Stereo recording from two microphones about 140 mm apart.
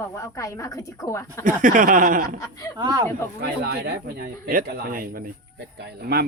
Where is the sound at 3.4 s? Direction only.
90° right.